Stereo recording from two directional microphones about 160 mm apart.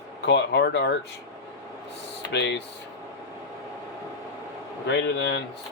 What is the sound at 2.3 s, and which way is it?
Speech, 90° left.